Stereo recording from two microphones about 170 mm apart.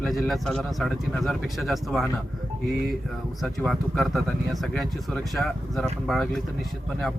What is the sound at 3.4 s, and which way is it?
Speech, centre (ahead or behind).